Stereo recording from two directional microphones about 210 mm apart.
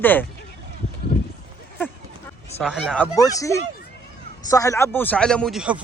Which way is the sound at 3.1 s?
15° left (ahead or behind).